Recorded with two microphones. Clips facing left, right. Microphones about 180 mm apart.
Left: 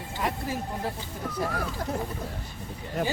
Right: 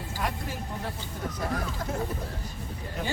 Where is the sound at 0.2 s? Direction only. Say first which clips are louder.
Left 3 dB; centre (ahead or behind).